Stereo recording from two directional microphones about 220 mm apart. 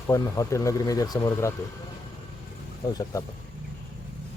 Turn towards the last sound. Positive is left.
turn(degrees=15)  # may be behind; listen again after turning